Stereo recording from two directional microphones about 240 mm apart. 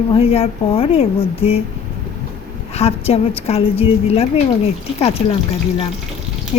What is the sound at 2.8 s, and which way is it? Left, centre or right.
A woman's voice, left.